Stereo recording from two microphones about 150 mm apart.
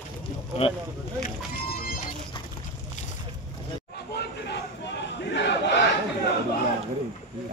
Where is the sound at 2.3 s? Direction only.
35° left (ahead or behind).